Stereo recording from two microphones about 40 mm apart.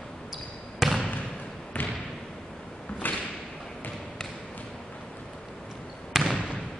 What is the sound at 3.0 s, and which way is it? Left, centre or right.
Thump, left.